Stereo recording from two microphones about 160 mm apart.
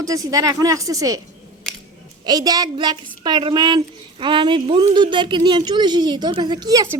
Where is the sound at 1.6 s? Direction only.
Centre (ahead or behind).